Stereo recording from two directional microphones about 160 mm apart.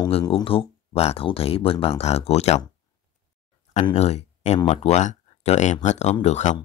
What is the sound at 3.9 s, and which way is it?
Speech, 45° left (ahead or behind).